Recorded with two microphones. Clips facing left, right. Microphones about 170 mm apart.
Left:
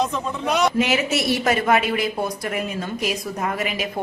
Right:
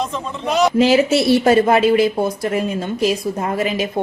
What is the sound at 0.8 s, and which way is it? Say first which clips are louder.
Speech: right 7 dB; 30° right (ahead or behind).